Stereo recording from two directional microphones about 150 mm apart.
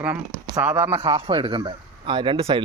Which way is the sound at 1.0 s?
30° right (ahead or behind).